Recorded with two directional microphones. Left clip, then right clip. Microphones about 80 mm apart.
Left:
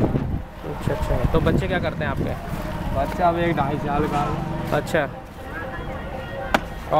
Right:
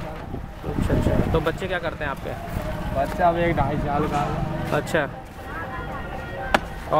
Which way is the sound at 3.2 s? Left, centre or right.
Centre.